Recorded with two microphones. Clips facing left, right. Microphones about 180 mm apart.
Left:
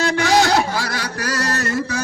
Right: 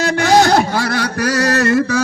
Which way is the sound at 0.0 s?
45° right (ahead or behind).